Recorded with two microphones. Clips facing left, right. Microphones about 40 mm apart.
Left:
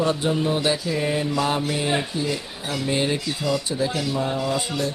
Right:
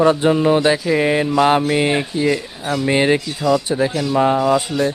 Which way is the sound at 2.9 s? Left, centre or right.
Right.